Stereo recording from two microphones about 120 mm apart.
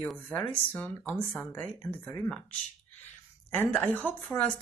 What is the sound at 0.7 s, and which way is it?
Speech, 15° left (ahead or behind).